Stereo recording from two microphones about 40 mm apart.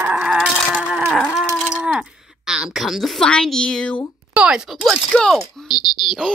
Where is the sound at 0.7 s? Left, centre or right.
Right.